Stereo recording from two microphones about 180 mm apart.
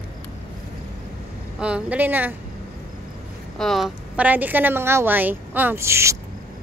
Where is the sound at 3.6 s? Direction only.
Centre (ahead or behind).